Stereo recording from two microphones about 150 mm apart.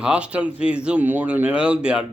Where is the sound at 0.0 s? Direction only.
5° right (ahead or behind).